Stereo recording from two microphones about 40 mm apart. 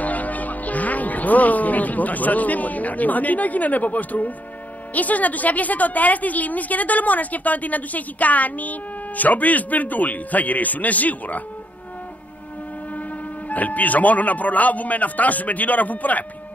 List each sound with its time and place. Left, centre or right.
0.0 s a woman's voice: left
13.5 s speech: left